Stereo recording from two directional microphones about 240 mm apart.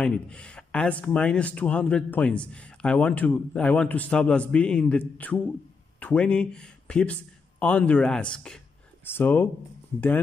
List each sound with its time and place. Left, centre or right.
0.0 s speech: centre